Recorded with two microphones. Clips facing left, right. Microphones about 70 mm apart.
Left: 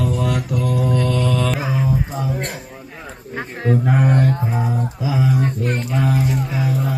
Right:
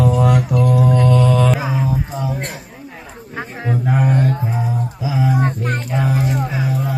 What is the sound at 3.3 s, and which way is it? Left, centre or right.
Humming, centre.